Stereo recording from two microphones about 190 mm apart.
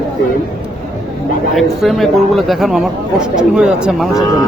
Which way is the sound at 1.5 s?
Centre (ahead or behind).